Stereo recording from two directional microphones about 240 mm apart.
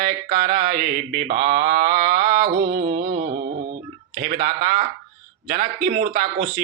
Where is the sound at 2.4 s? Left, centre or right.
Right.